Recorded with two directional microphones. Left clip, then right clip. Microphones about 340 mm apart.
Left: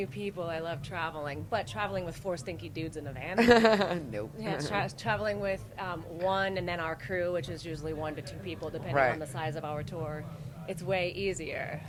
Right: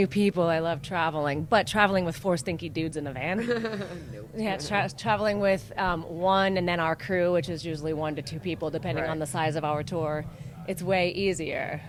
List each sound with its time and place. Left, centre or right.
0.0 s speech: right
3.3 s speech: left
4.4 s speech: right
5.4 s speech: right
6.2 s speech: right